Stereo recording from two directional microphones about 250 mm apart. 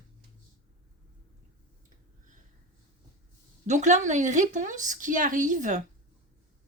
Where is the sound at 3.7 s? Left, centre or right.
Right.